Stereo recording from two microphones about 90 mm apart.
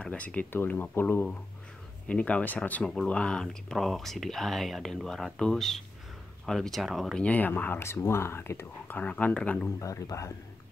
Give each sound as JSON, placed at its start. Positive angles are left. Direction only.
{"t": 0.0, "sound": "speech", "side_deg": 15}
{"t": 7.2, "sound": "speech", "side_deg": 15}
{"t": 8.9, "sound": "speech", "side_deg": 15}
{"t": 9.8, "sound": "speech", "side_deg": 35}